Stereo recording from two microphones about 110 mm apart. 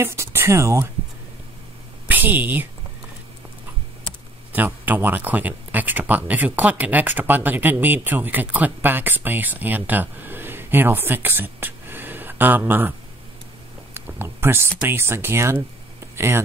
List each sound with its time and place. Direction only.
0.0 s speech: 25° right (ahead or behind)
2.0 s a woman's voice: 15° right (ahead or behind)
4.5 s speech: 15° right (ahead or behind)
13.9 s speech: 20° right (ahead or behind)